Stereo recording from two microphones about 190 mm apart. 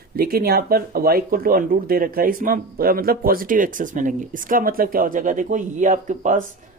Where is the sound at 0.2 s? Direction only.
50° right (ahead or behind).